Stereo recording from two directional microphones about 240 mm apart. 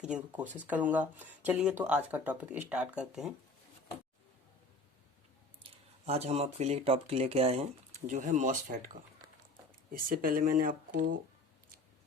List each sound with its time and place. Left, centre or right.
0.0 s speech: centre
5.7 s speech: right